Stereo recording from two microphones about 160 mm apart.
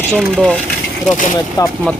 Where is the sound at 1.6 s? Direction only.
25° left (ahead or behind).